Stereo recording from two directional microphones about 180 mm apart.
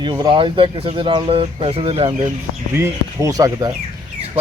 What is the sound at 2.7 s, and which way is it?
Speech, 15° right (ahead or behind).